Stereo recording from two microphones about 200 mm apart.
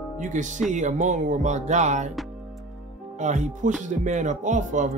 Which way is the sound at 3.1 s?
35° right (ahead or behind).